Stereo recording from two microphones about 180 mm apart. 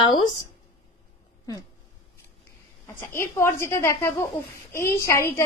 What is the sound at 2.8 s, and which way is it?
A woman's voice, 15° left (ahead or behind).